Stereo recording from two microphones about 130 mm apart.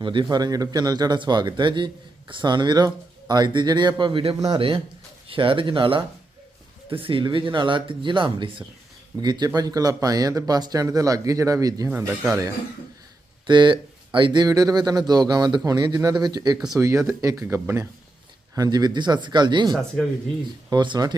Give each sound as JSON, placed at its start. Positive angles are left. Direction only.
{"t": 0.0, "sound": "speech", "side_deg": -40}
{"t": 11.9, "sound": "speech", "side_deg": -15}
{"t": 13.5, "sound": "speech", "side_deg": -35}